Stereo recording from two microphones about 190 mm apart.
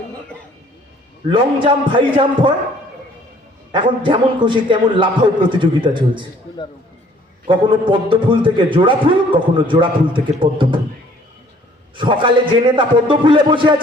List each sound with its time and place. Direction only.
1.3 s a man's voice: 25° right (ahead or behind)
3.7 s a man's voice: 25° right (ahead or behind)
7.4 s a man's voice: 25° right (ahead or behind)
11.9 s a man's voice: 25° right (ahead or behind)